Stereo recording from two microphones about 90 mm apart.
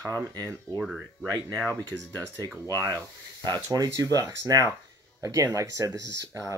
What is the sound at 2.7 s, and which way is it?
Speech, 35° right (ahead or behind).